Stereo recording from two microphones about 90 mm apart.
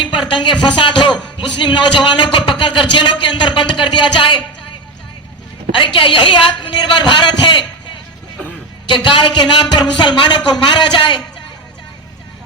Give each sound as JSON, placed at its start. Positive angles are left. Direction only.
{"t": 0.0, "sound": "speech", "side_deg": 60}
{"t": 5.7, "sound": "speech", "side_deg": 70}
{"t": 8.9, "sound": "speech", "side_deg": 60}